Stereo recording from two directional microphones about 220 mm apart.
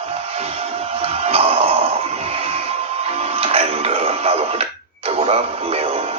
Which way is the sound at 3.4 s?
25° right (ahead or behind).